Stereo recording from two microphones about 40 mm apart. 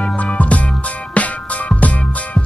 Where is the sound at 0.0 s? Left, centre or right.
Left.